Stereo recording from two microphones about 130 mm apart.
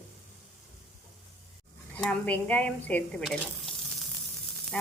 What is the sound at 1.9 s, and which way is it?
Stir, 10° left (ahead or behind).